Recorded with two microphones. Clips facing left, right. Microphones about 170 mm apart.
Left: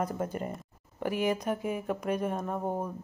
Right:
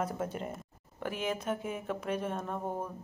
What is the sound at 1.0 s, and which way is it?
Speech, 10° left (ahead or behind).